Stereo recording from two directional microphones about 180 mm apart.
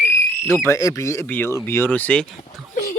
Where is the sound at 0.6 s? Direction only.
20° left (ahead or behind).